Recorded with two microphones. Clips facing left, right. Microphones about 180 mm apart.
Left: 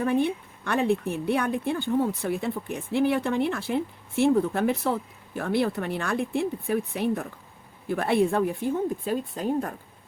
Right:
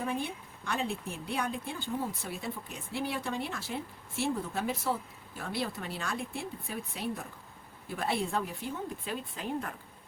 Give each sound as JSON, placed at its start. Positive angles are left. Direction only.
{"t": 0.0, "sound": "a woman's voice", "side_deg": 60}